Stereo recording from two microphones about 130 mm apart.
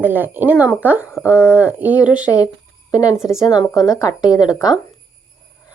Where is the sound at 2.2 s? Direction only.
25° left (ahead or behind).